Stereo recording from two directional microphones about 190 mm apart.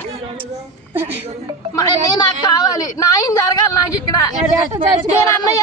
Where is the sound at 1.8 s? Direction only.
20° left (ahead or behind).